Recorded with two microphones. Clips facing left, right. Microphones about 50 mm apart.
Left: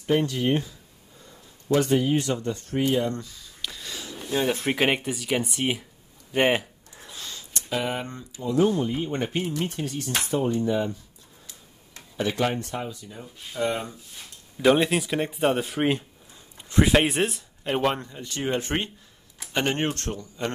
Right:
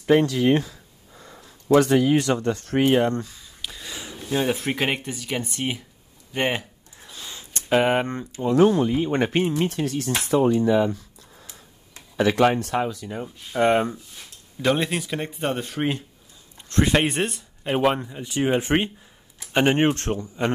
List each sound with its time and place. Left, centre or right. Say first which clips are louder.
0.0 s speech: right 5 dB; right
2.9 s speech: right 5 dB; right
3.6 s a sound: right 1 dB; centre
4.7 s speech: left 2 dB; centre
6.9 s gasp: left 1 dB; centre
7.5 s speech: right 9 dB; right
9.6 s speech: right 5 dB; right
12.2 s speech: right 7 dB; right
13.5 s speech: right 8 dB; right
14.6 s speech: left 3 dB; centre; by 20.5 s right